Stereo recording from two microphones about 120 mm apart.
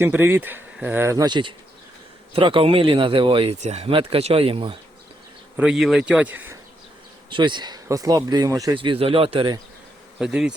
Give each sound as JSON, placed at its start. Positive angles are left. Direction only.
{"t": 0.0, "sound": "speech", "side_deg": -20}
{"t": 1.2, "sound": "speech", "side_deg": -40}
{"t": 3.6, "sound": "speech", "side_deg": -70}
{"t": 3.8, "sound": "speech", "side_deg": -50}
{"t": 5.5, "sound": "speech", "side_deg": -5}
{"t": 7.3, "sound": "speech", "side_deg": -45}
{"t": 8.7, "sound": "speech", "side_deg": -45}
{"t": 10.2, "sound": "bee", "side_deg": -5}